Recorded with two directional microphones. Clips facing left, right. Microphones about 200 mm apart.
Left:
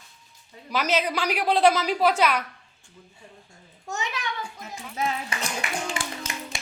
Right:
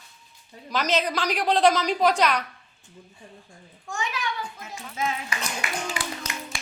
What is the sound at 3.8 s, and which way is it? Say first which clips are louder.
Speech: even; 20° left (ahead or behind).